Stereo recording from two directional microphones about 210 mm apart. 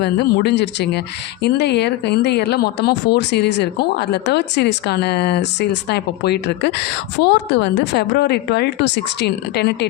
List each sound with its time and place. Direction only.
0.0 s speech: 50° left (ahead or behind)